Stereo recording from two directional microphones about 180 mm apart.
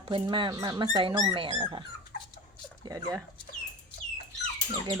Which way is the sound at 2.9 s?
20° right (ahead or behind).